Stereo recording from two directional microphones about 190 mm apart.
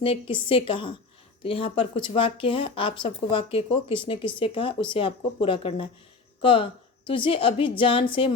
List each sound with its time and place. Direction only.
0.0 s speech: 30° left (ahead or behind)